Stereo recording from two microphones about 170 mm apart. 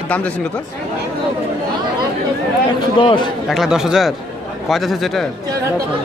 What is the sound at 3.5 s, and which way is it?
Speech, 5° right (ahead or behind).